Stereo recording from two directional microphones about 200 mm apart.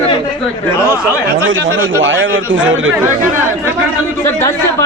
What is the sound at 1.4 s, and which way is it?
A man's voice, 70° right (ahead or behind).